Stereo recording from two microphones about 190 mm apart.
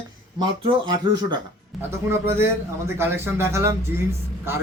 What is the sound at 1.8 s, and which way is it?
Speech, 10° right (ahead or behind).